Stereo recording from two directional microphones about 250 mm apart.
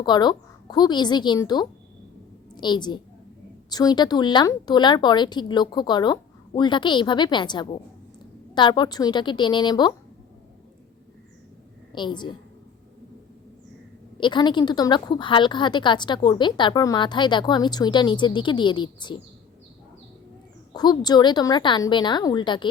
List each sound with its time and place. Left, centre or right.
0.0 s a woman's voice: centre
11.9 s a woman's voice: centre
14.2 s a woman's voice: centre
20.7 s a woman's voice: centre